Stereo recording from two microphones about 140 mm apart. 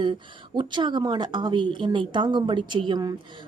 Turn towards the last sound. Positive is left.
turn(degrees=-30)  # may be behind; listen again after turning